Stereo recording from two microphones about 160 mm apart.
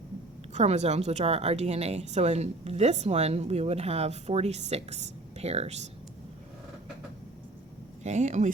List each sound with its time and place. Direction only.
0.5 s a woman's voice: 45° right (ahead or behind)
8.0 s a woman's voice: 45° right (ahead or behind)